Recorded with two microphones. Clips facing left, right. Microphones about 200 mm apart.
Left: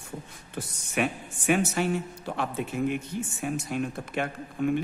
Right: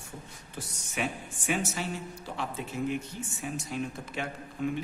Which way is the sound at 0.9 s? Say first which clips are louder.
Left 5 dB; 60° left (ahead or behind).